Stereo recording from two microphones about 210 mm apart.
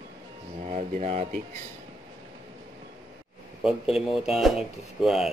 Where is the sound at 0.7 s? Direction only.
35° right (ahead or behind).